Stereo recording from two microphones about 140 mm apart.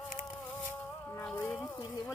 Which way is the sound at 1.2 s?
5° left (ahead or behind).